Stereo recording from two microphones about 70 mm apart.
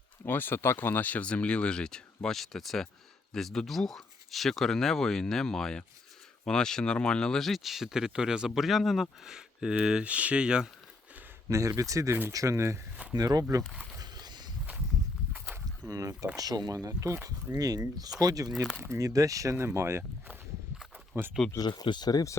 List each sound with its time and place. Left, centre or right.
0.3 s speech: left; by 10.7 s centre
11.8 s speech: right
13.1 s speech: right
14.0 s a sound: right
15.9 s speech: right
16.7 s speech: right
17.6 s speech: right
18.8 s speech: right
21.1 s speech: right
21.6 s speech: left